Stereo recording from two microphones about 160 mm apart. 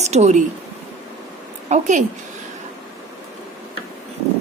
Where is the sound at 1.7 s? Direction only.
50° right (ahead or behind).